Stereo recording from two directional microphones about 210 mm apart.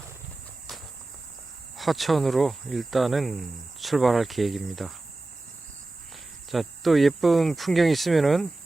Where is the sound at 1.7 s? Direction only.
Centre (ahead or behind).